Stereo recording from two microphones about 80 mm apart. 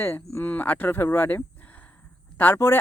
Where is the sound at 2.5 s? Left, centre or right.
Left.